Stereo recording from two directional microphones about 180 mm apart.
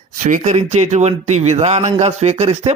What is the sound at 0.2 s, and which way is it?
Speech, 45° right (ahead or behind).